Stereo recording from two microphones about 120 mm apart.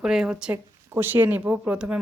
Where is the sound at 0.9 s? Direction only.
15° right (ahead or behind).